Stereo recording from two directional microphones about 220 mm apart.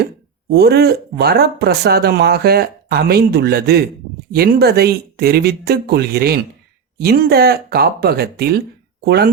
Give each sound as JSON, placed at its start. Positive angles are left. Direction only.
{"t": 0.5, "sound": "speech", "side_deg": -45}